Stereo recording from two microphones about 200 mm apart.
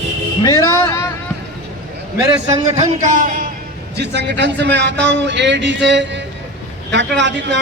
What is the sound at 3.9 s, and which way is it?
Speech, 60° right (ahead or behind).